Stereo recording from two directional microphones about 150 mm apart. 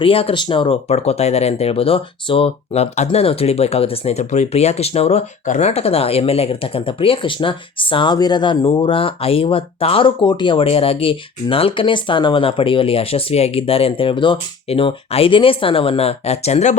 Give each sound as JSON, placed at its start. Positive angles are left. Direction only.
{"t": 0.0, "sound": "speech", "side_deg": 40}